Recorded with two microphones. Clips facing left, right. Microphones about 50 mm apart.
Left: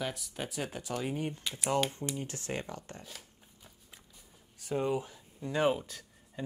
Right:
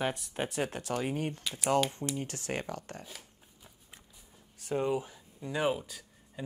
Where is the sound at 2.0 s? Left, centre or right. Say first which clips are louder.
Right 2 dB; centre.